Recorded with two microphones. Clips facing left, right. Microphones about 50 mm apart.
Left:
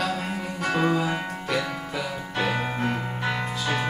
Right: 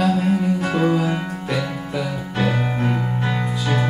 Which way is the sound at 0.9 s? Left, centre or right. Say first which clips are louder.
Right 4 dB; centre.